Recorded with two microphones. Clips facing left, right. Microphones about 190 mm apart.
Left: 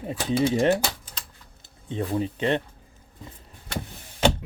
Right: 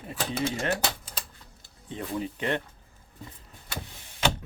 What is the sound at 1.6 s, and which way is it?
Speech, 30° left (ahead or behind).